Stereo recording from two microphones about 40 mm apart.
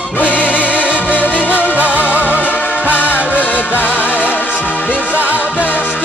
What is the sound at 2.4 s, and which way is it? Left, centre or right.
Music, left.